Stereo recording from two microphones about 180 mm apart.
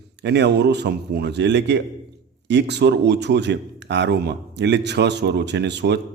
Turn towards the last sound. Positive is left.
turn(degrees=-70)  # may be behind; listen again after turning